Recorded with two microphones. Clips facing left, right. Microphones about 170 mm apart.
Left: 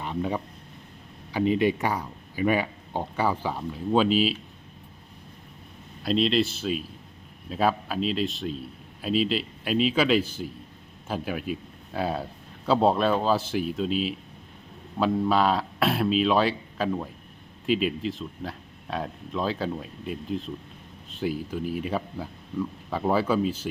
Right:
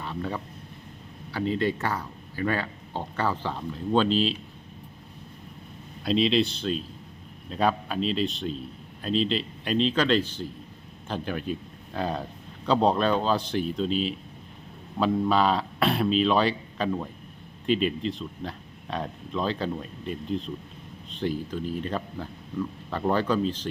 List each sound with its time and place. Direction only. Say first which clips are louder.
0.0 s speech: left 3 dB; 15° left (ahead or behind)
6.0 s a man's voice: even; centre (ahead or behind)